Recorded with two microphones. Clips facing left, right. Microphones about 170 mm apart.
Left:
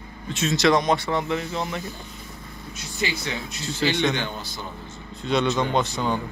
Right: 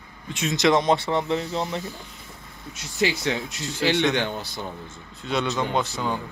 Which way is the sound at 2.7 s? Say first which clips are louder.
Right 4 dB; 90° right.